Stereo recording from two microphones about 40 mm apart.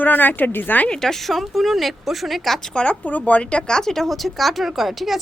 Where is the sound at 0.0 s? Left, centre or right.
Left.